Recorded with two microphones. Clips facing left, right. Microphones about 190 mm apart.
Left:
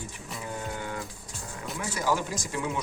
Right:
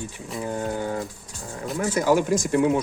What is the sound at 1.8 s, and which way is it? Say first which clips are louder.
Speech: right 8 dB; 50° right (ahead or behind).